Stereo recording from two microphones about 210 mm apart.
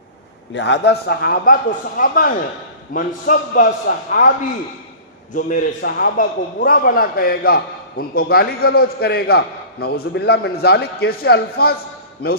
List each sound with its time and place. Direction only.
0.5 s a man's voice: 55° left (ahead or behind); by 4.3 s 40° left (ahead or behind)
5.3 s a man's voice: 40° left (ahead or behind)